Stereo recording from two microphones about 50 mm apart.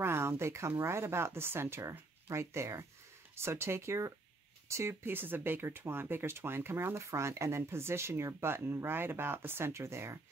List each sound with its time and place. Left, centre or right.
0.0 s speech: right
5.1 s speech: right
7.0 s speech: right